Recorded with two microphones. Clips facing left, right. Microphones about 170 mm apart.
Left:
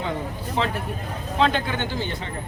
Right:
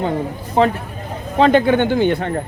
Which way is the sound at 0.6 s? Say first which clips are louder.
Right 10 dB; 50° right (ahead or behind).